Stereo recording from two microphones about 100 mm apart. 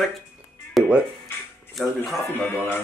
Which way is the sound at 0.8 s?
Centre (ahead or behind).